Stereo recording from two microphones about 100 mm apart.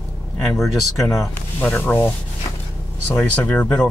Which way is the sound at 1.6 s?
15° left (ahead or behind).